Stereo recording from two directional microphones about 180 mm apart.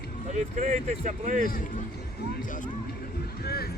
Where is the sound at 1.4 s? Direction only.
55° left (ahead or behind).